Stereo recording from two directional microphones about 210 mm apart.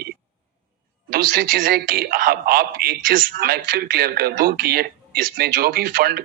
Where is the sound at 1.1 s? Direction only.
45° right (ahead or behind).